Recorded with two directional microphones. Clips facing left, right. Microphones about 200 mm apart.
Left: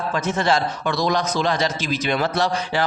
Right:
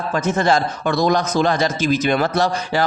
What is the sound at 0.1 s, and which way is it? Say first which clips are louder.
A man's voice: right 4 dB; 45° right (ahead or behind).